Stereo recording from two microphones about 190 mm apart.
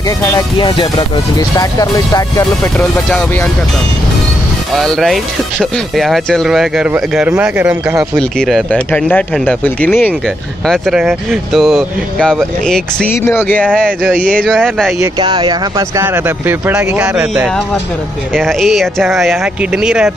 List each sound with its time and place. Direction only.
0.6 s speech: 25° left (ahead or behind)
2.8 s speech: 5° left (ahead or behind)
4.7 s speech: centre (ahead or behind)
8.2 s speech: centre (ahead or behind)
10.7 s speech: centre (ahead or behind)
15.1 s speech: 25° right (ahead or behind)
16.0 s speech: 10° right (ahead or behind)